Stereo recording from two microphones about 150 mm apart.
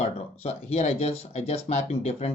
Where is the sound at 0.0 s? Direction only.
45° left (ahead or behind).